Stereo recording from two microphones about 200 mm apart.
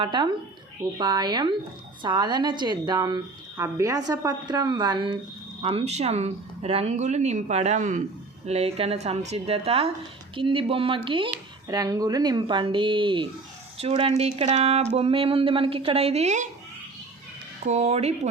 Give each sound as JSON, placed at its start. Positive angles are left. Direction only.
{"t": 0.0, "sound": "a woman's voice", "side_deg": -25}
{"t": 17.7, "sound": "speech", "side_deg": -35}